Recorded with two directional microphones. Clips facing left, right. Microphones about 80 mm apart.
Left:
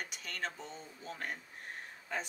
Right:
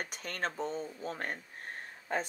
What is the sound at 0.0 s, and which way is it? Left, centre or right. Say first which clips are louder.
Speech: right 4 dB; right.